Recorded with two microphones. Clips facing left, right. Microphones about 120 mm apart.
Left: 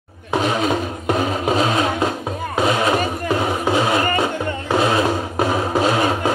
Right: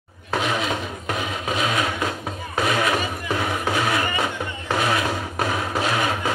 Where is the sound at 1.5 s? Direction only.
35° left (ahead or behind).